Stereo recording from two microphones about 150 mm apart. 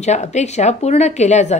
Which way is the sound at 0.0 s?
50° left (ahead or behind).